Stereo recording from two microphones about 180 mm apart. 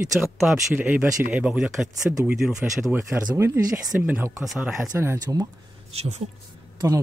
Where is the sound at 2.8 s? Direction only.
15° right (ahead or behind).